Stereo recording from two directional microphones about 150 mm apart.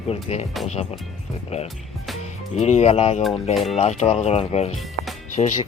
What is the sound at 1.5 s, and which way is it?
Speech, 45° left (ahead or behind).